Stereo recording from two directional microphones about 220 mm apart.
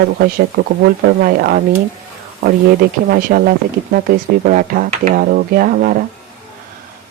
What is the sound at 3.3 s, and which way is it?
Speech, 45° right (ahead or behind).